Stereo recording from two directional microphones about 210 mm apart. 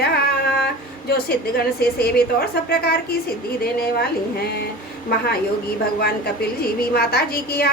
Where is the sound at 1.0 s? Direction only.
50° left (ahead or behind).